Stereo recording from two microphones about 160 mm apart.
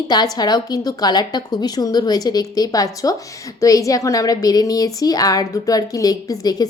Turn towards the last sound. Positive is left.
turn(degrees=25)  # may be behind; listen again after turning